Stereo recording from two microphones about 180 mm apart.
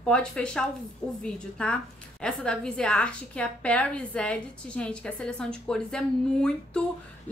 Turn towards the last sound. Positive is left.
turn(degrees=5)  # may be behind; listen again after turning